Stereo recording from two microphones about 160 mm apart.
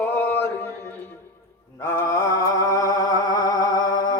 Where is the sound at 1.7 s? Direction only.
15° left (ahead or behind).